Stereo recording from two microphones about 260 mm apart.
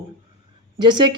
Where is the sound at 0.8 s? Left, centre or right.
Centre.